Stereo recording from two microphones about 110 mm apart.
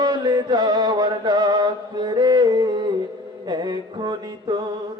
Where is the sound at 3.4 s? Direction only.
40° right (ahead or behind).